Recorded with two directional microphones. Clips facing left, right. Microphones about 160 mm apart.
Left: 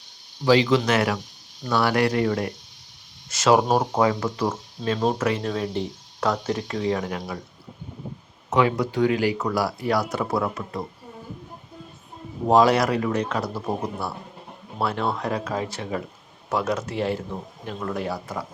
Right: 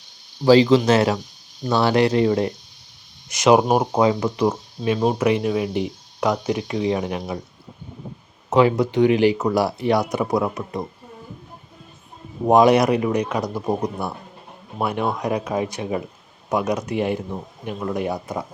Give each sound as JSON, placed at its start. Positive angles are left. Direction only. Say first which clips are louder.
{"t": 0.4, "sound": "speech", "louder": "right 5 dB", "side_deg": -35}
{"t": 8.4, "sound": "speech", "louder": "right 5 dB", "side_deg": -30}
{"t": 12.5, "sound": "speech", "louder": "right 4 dB", "side_deg": -20}